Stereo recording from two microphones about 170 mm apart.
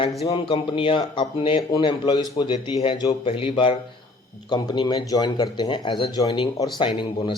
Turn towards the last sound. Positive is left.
turn(degrees=30)  # may be behind; listen again after turning